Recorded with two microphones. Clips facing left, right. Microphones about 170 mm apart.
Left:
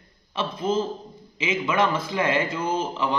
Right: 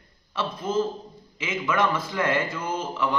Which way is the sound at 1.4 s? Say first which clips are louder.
Left 2 dB; 20° left (ahead or behind).